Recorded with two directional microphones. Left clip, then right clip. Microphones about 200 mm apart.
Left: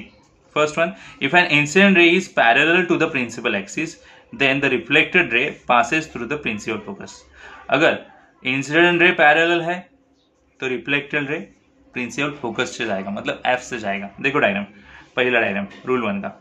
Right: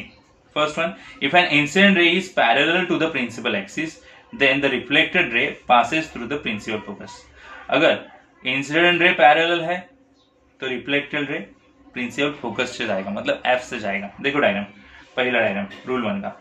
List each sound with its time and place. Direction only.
0.5 s speech: 30° left (ahead or behind)